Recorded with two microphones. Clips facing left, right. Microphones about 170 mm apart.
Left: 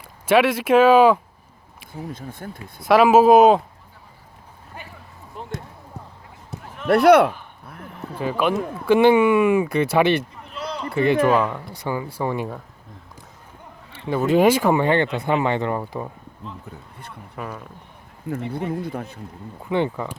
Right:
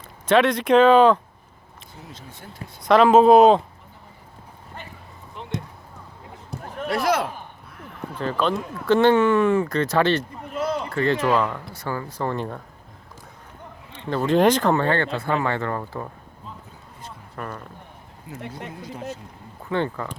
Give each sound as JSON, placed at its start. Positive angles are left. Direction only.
{"t": 0.3, "sound": "speech", "side_deg": 5}
{"t": 1.9, "sound": "speech", "side_deg": 50}
{"t": 2.8, "sound": "speech", "side_deg": 5}
{"t": 5.4, "sound": "basketball bounce", "side_deg": 40}
{"t": 6.5, "sound": "a sound", "side_deg": 0}
{"t": 6.8, "sound": "a sound", "side_deg": 60}
{"t": 8.2, "sound": "speech", "side_deg": 10}
{"t": 10.4, "sound": "a sound", "side_deg": -50}
{"t": 10.9, "sound": "speech", "side_deg": 15}
{"t": 13.9, "sound": "speech", "side_deg": 5}
{"t": 17.3, "sound": "a sound", "side_deg": 5}
{"t": 18.5, "sound": "speech", "side_deg": 55}
{"t": 19.7, "sound": "speech", "side_deg": 15}